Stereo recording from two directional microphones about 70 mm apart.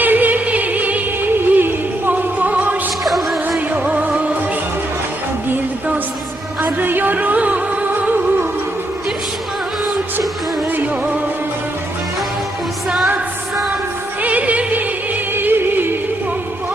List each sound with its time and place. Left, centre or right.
0.0 s music: right
3.0 s music: centre
3.7 s music: right
6.6 s music: right
10.7 s music: right
14.2 s music: right